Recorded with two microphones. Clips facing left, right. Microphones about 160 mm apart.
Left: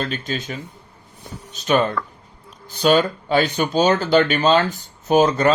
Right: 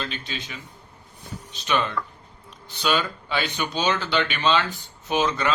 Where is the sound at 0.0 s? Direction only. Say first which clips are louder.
Left 7 dB; 45° left (ahead or behind).